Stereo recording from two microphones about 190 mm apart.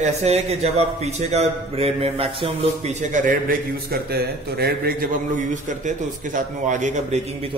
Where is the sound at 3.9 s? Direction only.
55° right (ahead or behind).